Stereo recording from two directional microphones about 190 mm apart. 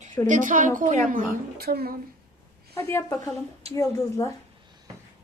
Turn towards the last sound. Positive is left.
turn(degrees=15)  # may be behind; listen again after turning